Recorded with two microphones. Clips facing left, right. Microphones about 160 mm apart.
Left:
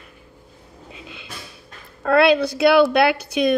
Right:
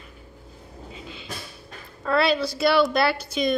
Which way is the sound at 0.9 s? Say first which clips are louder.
Even; 65° left (ahead or behind).